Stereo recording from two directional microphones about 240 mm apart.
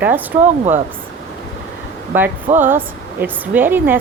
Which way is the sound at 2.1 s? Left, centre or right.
Centre.